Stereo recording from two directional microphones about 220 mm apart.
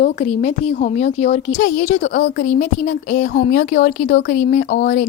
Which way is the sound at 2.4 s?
35° left (ahead or behind).